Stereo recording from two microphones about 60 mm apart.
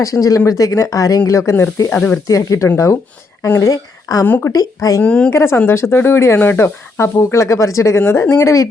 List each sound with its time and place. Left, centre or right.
0.0 s speech: left
1.3 s speech: left
1.9 s speech: left
2.2 s speech: left
2.7 s speech: left
3.6 s a woman's voice: left
5.0 s speech: left
5.3 s speech: left
7.9 s speech: left